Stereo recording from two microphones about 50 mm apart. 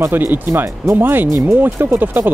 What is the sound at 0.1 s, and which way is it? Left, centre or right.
Speech, right.